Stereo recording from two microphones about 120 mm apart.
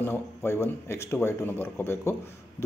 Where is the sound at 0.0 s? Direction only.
20° left (ahead or behind).